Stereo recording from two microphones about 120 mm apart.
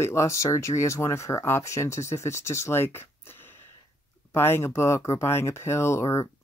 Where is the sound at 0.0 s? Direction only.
25° left (ahead or behind).